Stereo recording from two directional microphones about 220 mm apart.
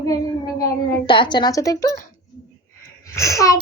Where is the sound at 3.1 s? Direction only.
15° left (ahead or behind).